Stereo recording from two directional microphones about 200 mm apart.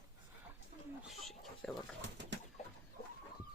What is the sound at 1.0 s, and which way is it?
Bird, centre (ahead or behind).